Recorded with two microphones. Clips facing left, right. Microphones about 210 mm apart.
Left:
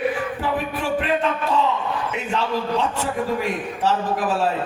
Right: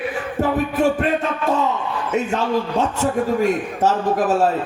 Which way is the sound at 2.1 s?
45° right (ahead or behind).